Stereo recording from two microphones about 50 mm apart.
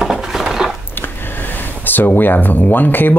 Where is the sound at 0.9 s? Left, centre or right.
Left.